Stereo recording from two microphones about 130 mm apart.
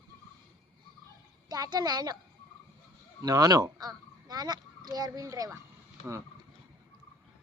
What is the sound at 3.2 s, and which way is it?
Speech, 30° right (ahead or behind).